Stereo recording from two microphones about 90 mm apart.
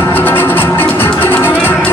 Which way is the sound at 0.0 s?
25° left (ahead or behind).